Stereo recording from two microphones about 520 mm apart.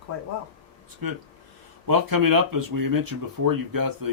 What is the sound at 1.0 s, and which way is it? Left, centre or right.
Speech, right.